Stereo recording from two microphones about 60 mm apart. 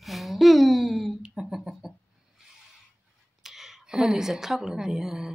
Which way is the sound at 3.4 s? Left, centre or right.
Centre.